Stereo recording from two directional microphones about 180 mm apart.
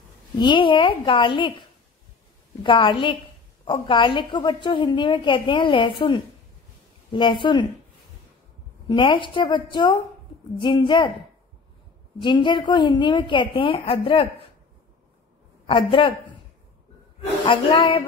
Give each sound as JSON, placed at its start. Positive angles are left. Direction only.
{"t": 0.4, "sound": "a woman's voice", "side_deg": 25}
{"t": 2.6, "sound": "a woman's voice", "side_deg": 30}
{"t": 8.8, "sound": "a woman's voice", "side_deg": 25}
{"t": 15.6, "sound": "a man's voice", "side_deg": 30}
{"t": 17.5, "sound": "a woman's voice", "side_deg": 30}